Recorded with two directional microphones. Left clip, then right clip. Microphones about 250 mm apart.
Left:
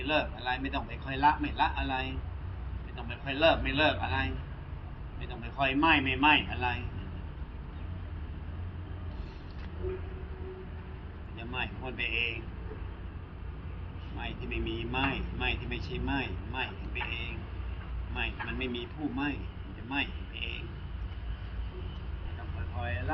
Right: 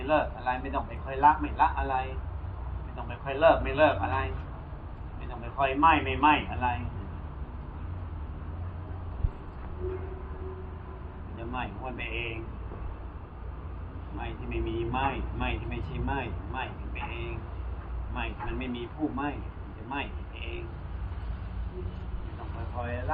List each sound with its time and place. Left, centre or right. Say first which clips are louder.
0.0 s a man's voice: right 4 dB; left
3.2 s speech: right 4 dB; left
5.4 s speech: right 4 dB; left
11.5 s a man's voice: even; left
14.2 s speech: right 1 dB; left
19.9 s a sound: left 2 dB; left